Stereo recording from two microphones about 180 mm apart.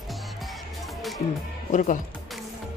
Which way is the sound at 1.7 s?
45° left (ahead or behind).